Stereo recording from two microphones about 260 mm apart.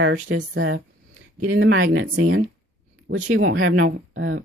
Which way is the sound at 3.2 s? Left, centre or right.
Right.